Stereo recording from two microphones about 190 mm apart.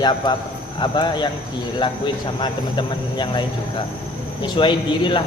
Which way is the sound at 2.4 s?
25° left (ahead or behind).